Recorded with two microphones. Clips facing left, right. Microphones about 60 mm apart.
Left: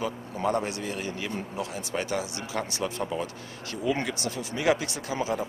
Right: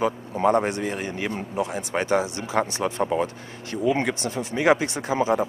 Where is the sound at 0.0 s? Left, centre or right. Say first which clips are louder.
Right 7 dB; right.